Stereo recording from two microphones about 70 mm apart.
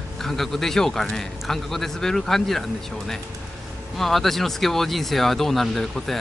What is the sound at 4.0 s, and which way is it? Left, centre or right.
A man's voice, centre.